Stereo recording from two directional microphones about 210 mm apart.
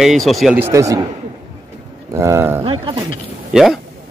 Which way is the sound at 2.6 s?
25° right (ahead or behind).